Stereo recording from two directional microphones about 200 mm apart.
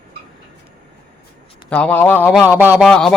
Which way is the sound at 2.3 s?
5° right (ahead or behind).